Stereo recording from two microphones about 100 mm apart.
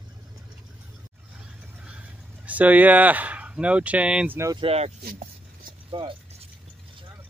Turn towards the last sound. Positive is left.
turn(degrees=-55)  # may be behind; listen again after turning